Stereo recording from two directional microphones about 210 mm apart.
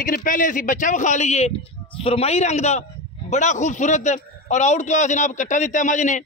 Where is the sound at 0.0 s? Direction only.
40° left (ahead or behind).